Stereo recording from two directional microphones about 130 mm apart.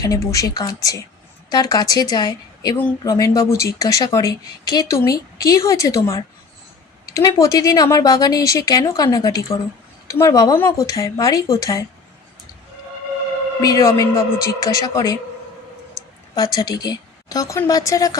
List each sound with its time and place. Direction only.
0.0 s a woman's voice: 25° left (ahead or behind)
13.6 s a woman's voice: 25° left (ahead or behind)
16.3 s a woman's voice: 30° left (ahead or behind)